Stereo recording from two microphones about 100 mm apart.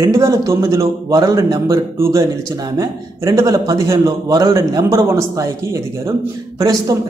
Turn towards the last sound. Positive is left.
turn(degrees=-40)  # may be behind; listen again after turning